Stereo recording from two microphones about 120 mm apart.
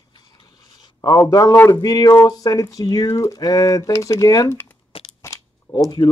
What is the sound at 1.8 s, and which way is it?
Speech, 30° left (ahead or behind).